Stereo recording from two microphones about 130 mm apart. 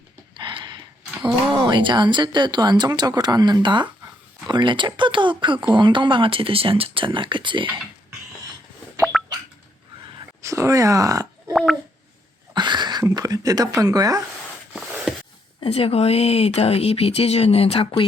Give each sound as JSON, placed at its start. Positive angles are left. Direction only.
{"t": 0.3, "sound": "a sound", "side_deg": -40}
{"t": 1.5, "sound": "speech", "side_deg": -35}
{"t": 10.4, "sound": "speech", "side_deg": -25}
{"t": 11.5, "sound": "a child's voice", "side_deg": 0}
{"t": 12.5, "sound": "speech", "side_deg": -35}
{"t": 14.7, "sound": "a sound", "side_deg": -5}
{"t": 15.6, "sound": "speech", "side_deg": 50}